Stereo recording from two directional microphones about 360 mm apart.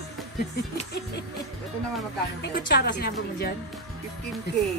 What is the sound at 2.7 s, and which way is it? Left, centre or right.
Speech, left.